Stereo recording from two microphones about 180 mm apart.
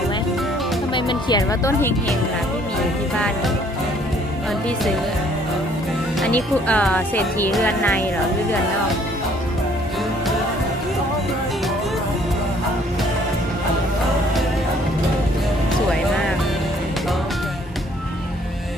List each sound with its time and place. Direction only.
0.9 s speech: 25° left (ahead or behind)
3.2 s music: 5° left (ahead or behind)
6.1 s speech: 5° left (ahead or behind)